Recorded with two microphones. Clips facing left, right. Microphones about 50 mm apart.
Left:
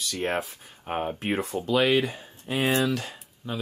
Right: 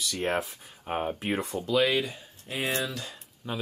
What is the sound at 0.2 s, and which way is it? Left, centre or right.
Speech, centre.